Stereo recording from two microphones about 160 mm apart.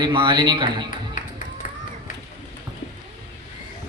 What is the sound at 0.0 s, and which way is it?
Speech, 30° right (ahead or behind).